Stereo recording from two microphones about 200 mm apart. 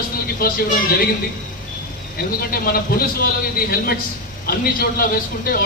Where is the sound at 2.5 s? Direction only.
45° left (ahead or behind).